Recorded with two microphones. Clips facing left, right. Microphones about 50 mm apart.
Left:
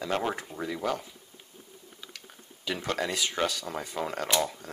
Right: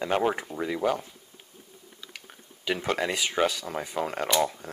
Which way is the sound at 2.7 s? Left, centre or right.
Centre.